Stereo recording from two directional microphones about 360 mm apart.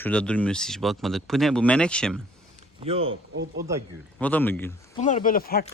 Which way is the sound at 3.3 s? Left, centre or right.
Right.